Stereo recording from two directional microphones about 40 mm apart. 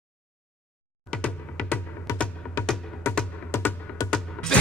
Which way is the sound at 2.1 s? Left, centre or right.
Left.